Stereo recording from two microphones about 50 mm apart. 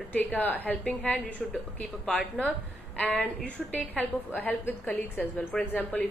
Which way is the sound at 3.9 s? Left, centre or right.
Left.